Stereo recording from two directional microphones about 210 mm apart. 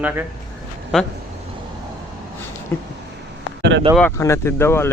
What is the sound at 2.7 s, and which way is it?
Speech, 10° left (ahead or behind).